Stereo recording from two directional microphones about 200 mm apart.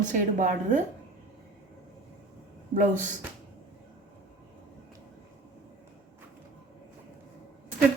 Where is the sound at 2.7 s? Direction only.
40° right (ahead or behind).